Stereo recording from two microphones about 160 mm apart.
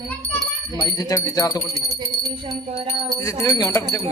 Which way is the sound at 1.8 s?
20° right (ahead or behind).